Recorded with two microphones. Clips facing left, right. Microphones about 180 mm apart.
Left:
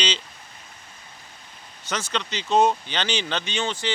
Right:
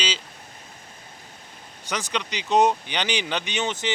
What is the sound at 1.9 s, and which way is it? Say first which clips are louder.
Speech: even; 15° right (ahead or behind).